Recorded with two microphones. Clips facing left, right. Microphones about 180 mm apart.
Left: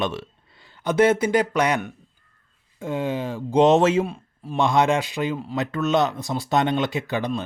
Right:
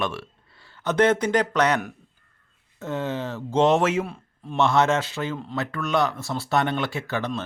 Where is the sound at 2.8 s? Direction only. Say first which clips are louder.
Left 2 dB; 10° left (ahead or behind).